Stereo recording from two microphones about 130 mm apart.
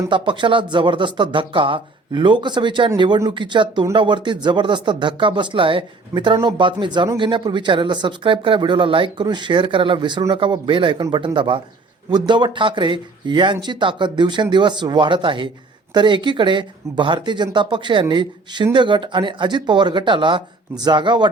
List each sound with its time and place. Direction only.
0.1 s speech: 40° right (ahead or behind)